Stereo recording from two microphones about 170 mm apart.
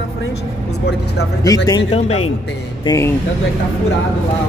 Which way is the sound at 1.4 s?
20° left (ahead or behind).